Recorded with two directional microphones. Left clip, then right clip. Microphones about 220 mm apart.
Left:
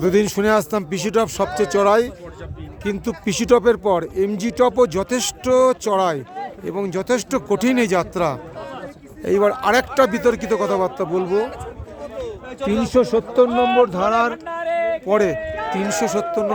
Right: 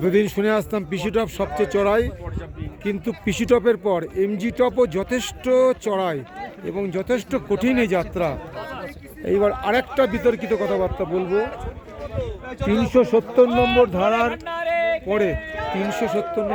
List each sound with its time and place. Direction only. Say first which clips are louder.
0.0 s speech: left 2 dB; 5° left (ahead or behind)
11.2 s a man's voice: left 2 dB; 20° right (ahead or behind)
12.5 s a man's voice: left 1 dB; 40° right (ahead or behind)
12.9 s speech: even; 10° right (ahead or behind)
13.5 s speech: left 1 dB; 35° right (ahead or behind)
13.8 s speech: left 1 dB; 5° right (ahead or behind)
14.3 s a sound: left 1 dB; 25° right (ahead or behind)
15.0 s speech: left 4 dB; 5° left (ahead or behind)
15.5 s a sound: left 2 dB; 50° right (ahead or behind)
15.9 s speech: left 3 dB; 5° left (ahead or behind)